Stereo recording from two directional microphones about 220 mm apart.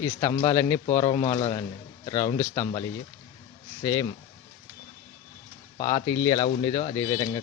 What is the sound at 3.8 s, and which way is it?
Speech, 15° left (ahead or behind).